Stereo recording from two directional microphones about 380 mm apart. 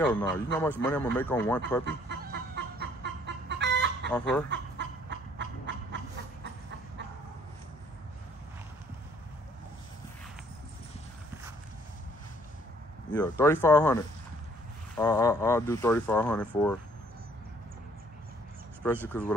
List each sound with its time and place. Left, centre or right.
0.0 s speech: centre
1.9 s chicken: right
13.1 s speech: centre
19.0 s speech: centre